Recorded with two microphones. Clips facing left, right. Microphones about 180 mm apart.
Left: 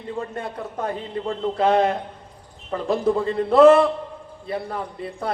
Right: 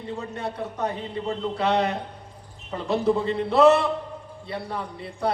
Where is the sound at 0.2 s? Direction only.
50° left (ahead or behind).